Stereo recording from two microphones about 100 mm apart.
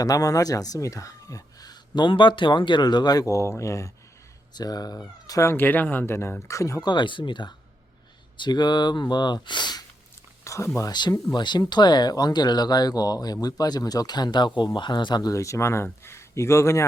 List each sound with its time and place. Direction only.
0.0 s speech: 35° left (ahead or behind)
6.8 s speech: 50° left (ahead or behind)
10.4 s a sound: 30° left (ahead or behind)
10.8 s speech: 40° left (ahead or behind)